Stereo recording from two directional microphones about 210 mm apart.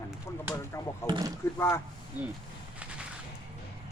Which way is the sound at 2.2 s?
5° right (ahead or behind).